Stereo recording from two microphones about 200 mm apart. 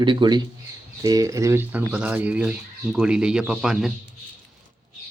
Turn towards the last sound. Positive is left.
turn(degrees=-5)  # may be behind; listen again after turning